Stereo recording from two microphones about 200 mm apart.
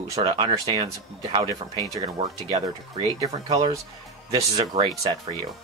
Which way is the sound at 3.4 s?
30° right (ahead or behind).